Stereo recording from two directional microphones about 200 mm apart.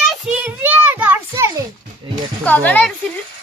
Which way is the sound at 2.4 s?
10° left (ahead or behind).